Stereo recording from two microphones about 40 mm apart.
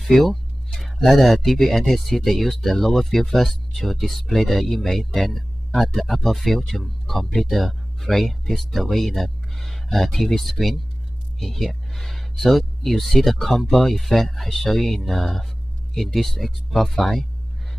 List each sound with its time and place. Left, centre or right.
0.0 s speech: centre